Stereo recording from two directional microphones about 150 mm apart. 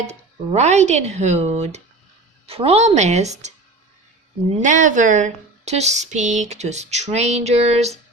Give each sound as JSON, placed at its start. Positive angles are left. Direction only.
{"t": 0.0, "sound": "speech", "side_deg": -50}
{"t": 4.6, "sound": "speech", "side_deg": -55}